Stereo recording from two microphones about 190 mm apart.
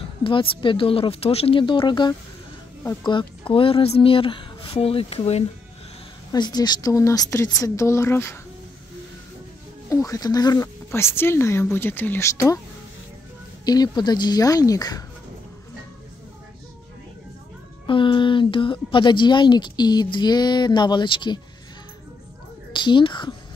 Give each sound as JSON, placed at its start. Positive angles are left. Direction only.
{"t": 0.2, "sound": "speech", "side_deg": 25}
{"t": 3.1, "sound": "speech", "side_deg": 25}
{"t": 6.3, "sound": "speech", "side_deg": 20}
{"t": 9.8, "sound": "speech", "side_deg": 15}
{"t": 13.7, "sound": "speech", "side_deg": 20}
{"t": 17.8, "sound": "speech", "side_deg": 25}
{"t": 22.7, "sound": "a woman's voice", "side_deg": 25}